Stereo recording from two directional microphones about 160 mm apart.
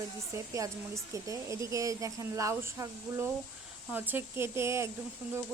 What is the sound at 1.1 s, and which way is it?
Speech, 20° right (ahead or behind).